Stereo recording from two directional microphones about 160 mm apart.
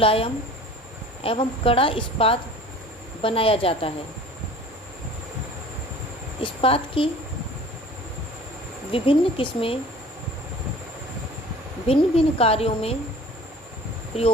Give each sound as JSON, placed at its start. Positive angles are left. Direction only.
{"t": 0.0, "sound": "a woman's voice", "side_deg": 35}
{"t": 6.4, "sound": "a woman's voice", "side_deg": 35}
{"t": 8.9, "sound": "a woman's voice", "side_deg": 35}
{"t": 11.9, "sound": "a woman's voice", "side_deg": 35}